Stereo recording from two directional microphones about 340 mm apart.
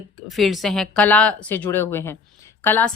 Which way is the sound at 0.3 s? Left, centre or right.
Centre.